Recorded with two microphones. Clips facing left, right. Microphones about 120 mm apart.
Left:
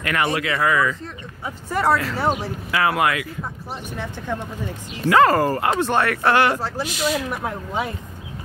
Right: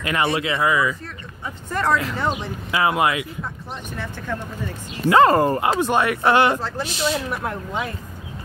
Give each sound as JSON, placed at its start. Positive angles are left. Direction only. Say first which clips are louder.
{"t": 0.0, "sound": "speech", "louder": "even", "side_deg": -25}
{"t": 1.0, "sound": "speech", "louder": "left 2 dB", "side_deg": 10}
{"t": 2.7, "sound": "speech", "louder": "even", "side_deg": -20}
{"t": 3.9, "sound": "speech", "louder": "left 1 dB", "side_deg": 15}
{"t": 5.1, "sound": "speech", "louder": "right 1 dB", "side_deg": -25}